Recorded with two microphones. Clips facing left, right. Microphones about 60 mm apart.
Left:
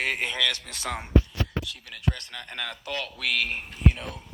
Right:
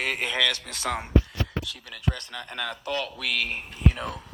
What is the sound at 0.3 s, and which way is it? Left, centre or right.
Speech, right.